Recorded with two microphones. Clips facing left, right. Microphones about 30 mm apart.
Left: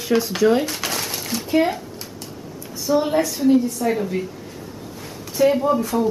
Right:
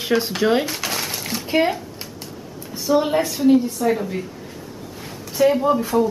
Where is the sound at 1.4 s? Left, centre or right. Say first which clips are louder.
Even; right.